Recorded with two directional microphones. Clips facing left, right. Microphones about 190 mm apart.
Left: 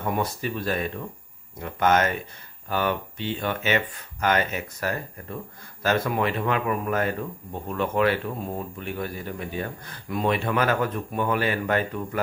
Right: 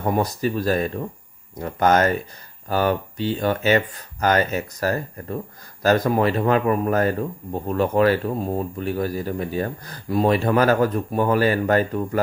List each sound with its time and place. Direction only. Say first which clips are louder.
0.0 s speech: right 5 dB; 40° right (ahead or behind)